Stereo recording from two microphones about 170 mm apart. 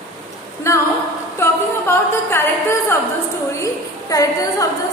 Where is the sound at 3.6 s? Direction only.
20° left (ahead or behind).